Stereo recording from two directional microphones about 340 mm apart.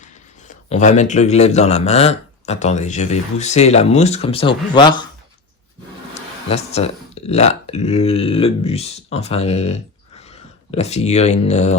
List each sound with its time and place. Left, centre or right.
0.7 s a man's voice: left
6.5 s a man's voice: centre